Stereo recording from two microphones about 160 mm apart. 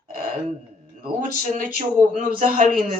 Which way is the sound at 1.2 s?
55° right (ahead or behind).